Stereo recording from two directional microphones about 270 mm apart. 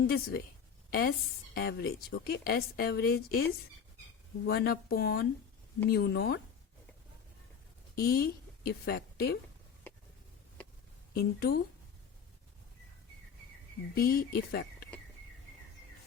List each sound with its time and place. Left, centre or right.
0.0 s a woman's voice: left
4.4 s a woman's voice: left
7.9 s a woman's voice: left
11.1 s a woman's voice: left
13.9 s a woman's voice: left